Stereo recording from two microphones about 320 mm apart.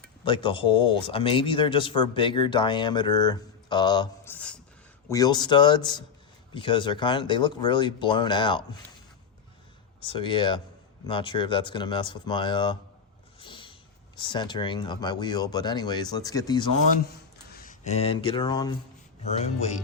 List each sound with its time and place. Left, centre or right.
0.3 s speech: centre
10.0 s speech: centre
13.4 s a sound: centre
14.2 s speech: centre
17.5 s speech: left